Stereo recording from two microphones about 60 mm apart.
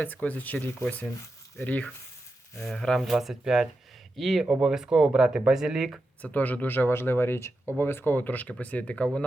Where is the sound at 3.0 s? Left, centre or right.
Centre.